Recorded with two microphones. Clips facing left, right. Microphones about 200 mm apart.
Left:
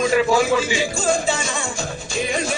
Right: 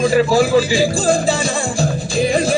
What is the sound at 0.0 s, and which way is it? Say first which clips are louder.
Music: right 4 dB; 35° right (ahead or behind).